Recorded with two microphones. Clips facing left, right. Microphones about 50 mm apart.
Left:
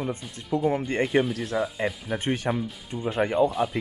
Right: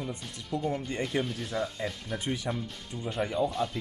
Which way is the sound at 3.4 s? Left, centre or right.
Centre.